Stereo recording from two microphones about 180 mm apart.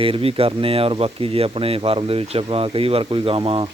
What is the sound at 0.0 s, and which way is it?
Speech, 30° right (ahead or behind).